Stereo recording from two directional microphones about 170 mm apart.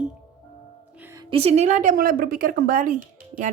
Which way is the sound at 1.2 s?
35° right (ahead or behind).